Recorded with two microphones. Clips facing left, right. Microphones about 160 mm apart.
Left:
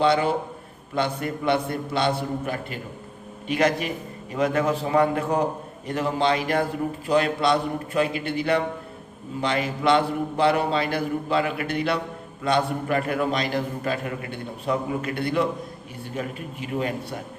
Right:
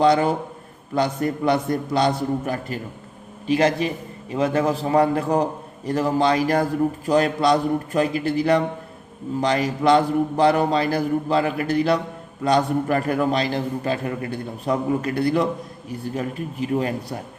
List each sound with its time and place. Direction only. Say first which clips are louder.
0.0 s a man's voice: right 3 dB; 45° right (ahead or behind)